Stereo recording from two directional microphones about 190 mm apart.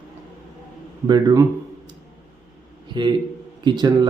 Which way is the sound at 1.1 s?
20° right (ahead or behind).